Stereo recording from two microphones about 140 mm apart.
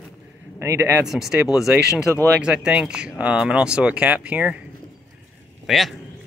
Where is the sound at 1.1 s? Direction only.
5° right (ahead or behind).